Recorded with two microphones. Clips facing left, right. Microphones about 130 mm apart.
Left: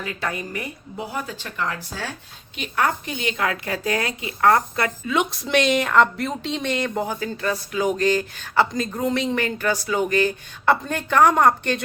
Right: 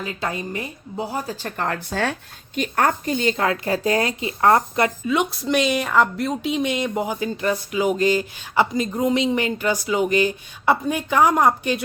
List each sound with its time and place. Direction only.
0.0 s a woman's voice: 25° right (ahead or behind); by 2.1 s 65° right (ahead or behind)
2.6 s speech: 45° right (ahead or behind); by 4.9 s 25° right (ahead or behind)
5.0 s a woman's voice: centre (ahead or behind)